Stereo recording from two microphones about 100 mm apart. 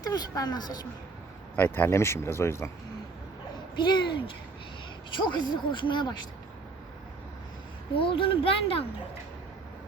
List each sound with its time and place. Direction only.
0.0 s speech: 40° left (ahead or behind)
1.5 s speech: 20° left (ahead or behind)
3.8 s speech: 50° left (ahead or behind)
7.9 s speech: 65° left (ahead or behind)